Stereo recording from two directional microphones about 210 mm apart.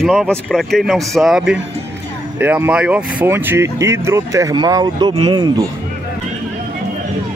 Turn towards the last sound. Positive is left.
turn(degrees=-20)  # may be behind; listen again after turning